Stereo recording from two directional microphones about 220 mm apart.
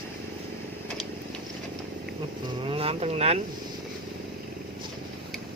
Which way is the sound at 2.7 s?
25° right (ahead or behind).